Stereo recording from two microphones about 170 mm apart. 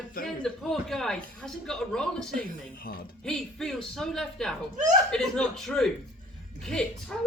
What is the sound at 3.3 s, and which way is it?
Speech, 5° left (ahead or behind).